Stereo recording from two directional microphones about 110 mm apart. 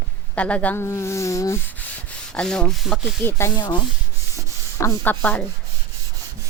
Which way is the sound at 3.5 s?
40° left (ahead or behind).